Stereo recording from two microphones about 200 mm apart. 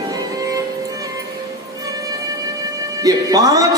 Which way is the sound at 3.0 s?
20° right (ahead or behind).